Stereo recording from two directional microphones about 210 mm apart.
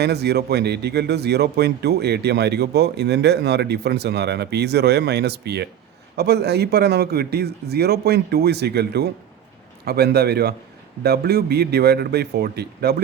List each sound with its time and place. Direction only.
0.0 s speech: 50° right (ahead or behind)